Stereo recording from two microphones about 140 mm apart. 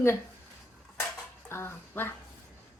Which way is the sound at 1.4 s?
20° left (ahead or behind).